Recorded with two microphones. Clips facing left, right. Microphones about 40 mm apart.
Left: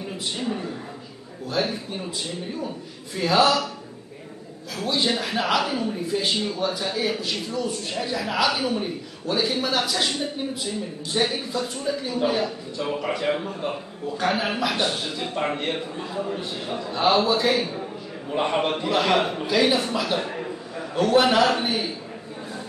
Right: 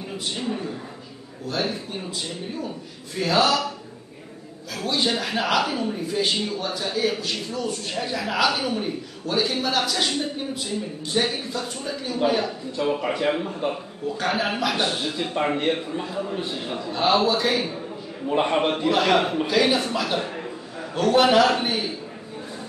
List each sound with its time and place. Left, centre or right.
0.4 s a sound: centre
1.6 s a man's voice: centre
3.2 s a man's voice: centre
4.8 s a man's voice: centre
6.6 s a man's voice: centre
12.4 s a man's voice: centre
15.1 s a man's voice: centre
21.6 s a sound: centre